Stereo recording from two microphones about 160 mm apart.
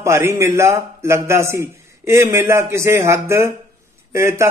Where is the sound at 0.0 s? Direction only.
15° right (ahead or behind).